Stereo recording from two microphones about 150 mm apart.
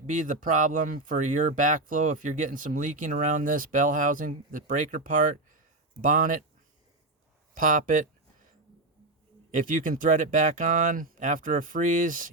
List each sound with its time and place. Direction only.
0.1 s speech: 60° right (ahead or behind)
7.5 s speech: 65° right (ahead or behind)
9.5 s speech: 65° right (ahead or behind)